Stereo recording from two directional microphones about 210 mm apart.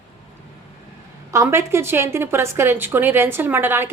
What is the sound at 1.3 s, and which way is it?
A woman's voice, 15° right (ahead or behind).